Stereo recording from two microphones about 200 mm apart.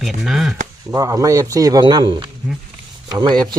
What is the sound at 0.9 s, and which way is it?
Speech, 15° right (ahead or behind).